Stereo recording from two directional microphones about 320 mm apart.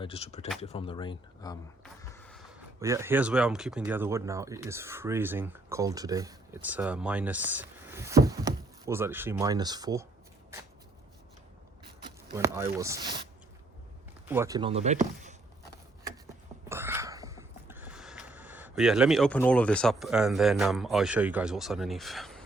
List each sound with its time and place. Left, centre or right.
0.0 s speech: centre
2.8 s speech: centre
12.4 s speech: centre
14.3 s speech: centre
16.6 s a sound: centre